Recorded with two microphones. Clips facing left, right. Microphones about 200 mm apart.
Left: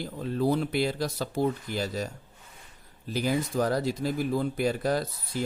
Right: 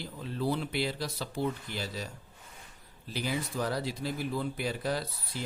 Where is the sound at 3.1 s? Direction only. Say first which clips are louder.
Left 6 dB; 45° left (ahead or behind).